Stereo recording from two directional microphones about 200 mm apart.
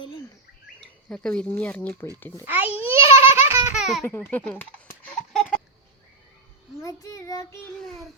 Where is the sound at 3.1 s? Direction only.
10° right (ahead or behind).